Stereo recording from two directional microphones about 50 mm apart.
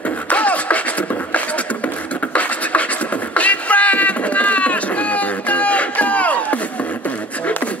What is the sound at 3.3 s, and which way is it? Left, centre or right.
Run, left.